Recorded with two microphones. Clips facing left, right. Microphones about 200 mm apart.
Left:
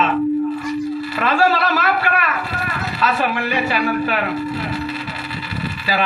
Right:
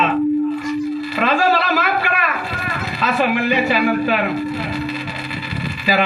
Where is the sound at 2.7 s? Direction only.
15° right (ahead or behind).